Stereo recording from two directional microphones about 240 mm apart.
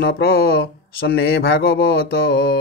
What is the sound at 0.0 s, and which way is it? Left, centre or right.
Mantra, left.